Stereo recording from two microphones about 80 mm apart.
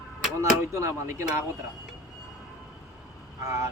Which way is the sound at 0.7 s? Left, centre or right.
Right.